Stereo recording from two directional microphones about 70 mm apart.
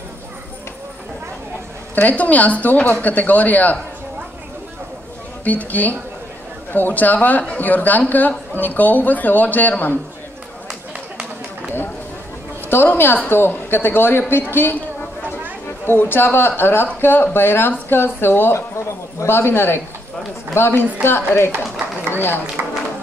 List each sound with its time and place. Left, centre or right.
2.0 s speech: left
5.4 s speech: left
12.6 s speech: left
15.8 s speech: left
22.6 s a sound: right